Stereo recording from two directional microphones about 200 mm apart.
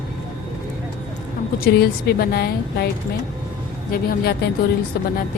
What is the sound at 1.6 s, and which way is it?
A woman's voice, 50° left (ahead or behind).